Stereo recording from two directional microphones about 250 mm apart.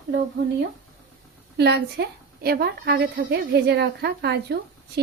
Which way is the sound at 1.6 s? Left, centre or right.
Right.